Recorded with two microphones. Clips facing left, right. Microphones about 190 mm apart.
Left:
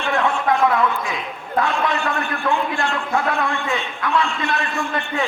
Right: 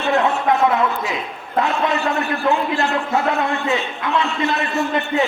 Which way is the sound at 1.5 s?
25° right (ahead or behind).